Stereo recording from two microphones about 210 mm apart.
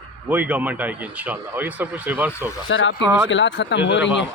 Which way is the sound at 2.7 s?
65° left (ahead or behind).